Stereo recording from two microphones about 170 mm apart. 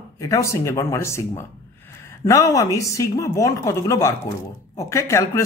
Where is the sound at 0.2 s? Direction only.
20° left (ahead or behind).